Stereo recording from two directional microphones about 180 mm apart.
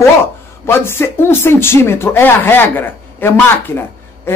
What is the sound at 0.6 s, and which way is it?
Speech, 15° left (ahead or behind).